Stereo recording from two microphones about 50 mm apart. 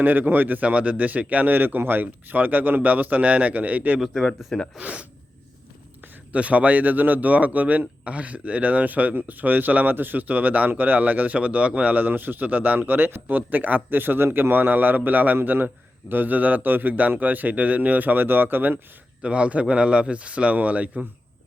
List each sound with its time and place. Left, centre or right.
0.0 s a man's voice: right
4.1 s speech: centre
4.8 s a man's voice: right
6.3 s a man's voice: right
14.3 s a man's voice: right
14.5 s a man's voice: right
19.2 s a man's voice: right